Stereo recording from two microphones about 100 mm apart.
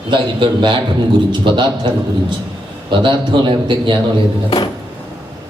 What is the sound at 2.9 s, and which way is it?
A man's voice, 55° right (ahead or behind).